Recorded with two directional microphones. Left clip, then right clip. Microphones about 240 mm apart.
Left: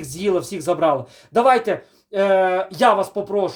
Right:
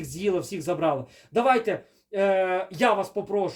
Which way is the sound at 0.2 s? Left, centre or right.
Centre.